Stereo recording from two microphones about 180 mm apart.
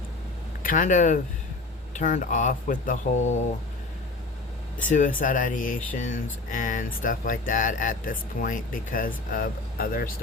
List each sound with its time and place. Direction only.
0.6 s speech: 50° left (ahead or behind)
4.8 s speech: 45° left (ahead or behind)